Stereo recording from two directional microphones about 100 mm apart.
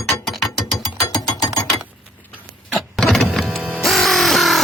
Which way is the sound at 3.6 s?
15° right (ahead or behind).